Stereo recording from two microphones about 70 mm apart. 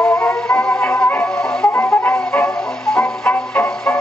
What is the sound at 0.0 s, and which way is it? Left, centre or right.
Music, centre.